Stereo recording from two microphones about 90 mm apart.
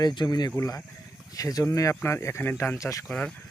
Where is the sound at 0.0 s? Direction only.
55° left (ahead or behind).